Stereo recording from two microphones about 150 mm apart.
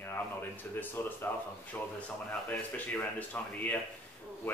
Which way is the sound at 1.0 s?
15° left (ahead or behind).